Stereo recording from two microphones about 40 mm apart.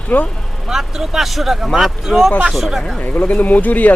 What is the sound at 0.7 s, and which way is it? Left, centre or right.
Speech, centre.